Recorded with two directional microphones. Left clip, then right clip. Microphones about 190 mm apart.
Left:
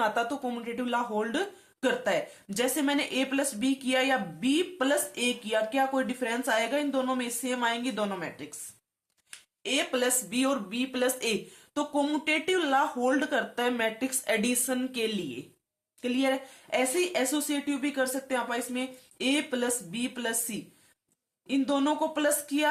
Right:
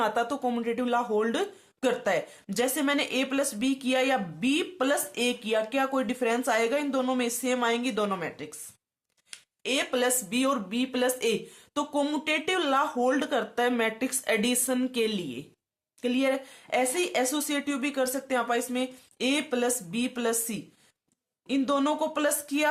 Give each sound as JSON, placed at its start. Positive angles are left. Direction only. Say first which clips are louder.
{"t": 0.0, "sound": "speech", "louder": "right 1 dB", "side_deg": -30}
{"t": 9.6, "sound": "speech", "louder": "right 1 dB", "side_deg": -35}